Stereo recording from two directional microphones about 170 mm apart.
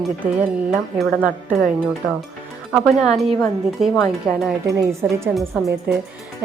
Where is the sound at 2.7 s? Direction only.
Centre (ahead or behind).